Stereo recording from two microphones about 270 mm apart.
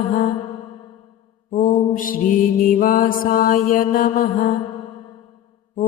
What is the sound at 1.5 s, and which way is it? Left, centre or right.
Mantra, left.